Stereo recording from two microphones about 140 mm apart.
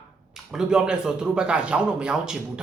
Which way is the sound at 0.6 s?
5° right (ahead or behind).